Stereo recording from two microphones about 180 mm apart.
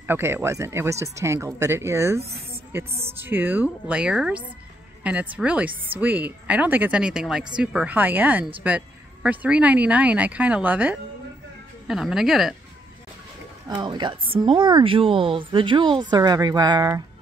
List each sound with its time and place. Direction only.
0.0 s speech: 10° right (ahead or behind)
13.7 s speech: 25° right (ahead or behind)